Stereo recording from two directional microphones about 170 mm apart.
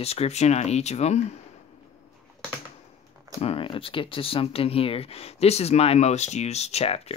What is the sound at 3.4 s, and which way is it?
Speech, 30° left (ahead or behind).